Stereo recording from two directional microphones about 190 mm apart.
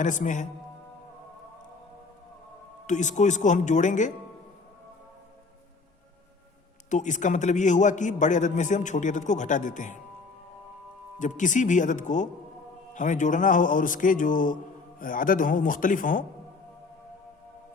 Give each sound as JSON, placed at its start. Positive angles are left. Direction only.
{"t": 0.0, "sound": "a man's voice", "side_deg": 40}
{"t": 2.8, "sound": "a man's voice", "side_deg": 40}
{"t": 6.9, "sound": "a man's voice", "side_deg": 40}
{"t": 11.2, "sound": "a man's voice", "side_deg": 40}